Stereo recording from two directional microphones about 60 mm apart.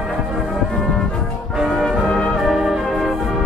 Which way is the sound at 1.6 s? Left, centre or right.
Centre.